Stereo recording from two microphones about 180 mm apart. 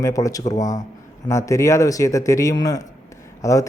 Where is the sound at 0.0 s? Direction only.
20° left (ahead or behind).